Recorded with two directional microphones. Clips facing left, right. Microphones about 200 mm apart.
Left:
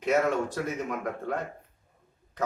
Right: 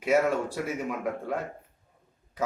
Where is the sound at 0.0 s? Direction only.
10° right (ahead or behind).